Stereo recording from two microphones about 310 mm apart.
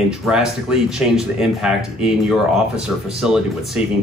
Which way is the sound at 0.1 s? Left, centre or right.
Centre.